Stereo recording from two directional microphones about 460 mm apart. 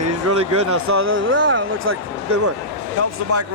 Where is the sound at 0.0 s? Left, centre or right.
Right.